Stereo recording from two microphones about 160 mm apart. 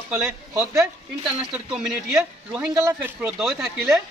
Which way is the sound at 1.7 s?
Centre (ahead or behind).